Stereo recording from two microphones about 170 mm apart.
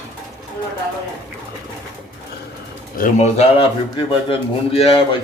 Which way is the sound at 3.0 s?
45° left (ahead or behind).